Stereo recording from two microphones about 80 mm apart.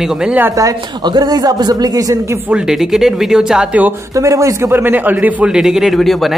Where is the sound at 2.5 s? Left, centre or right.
Centre.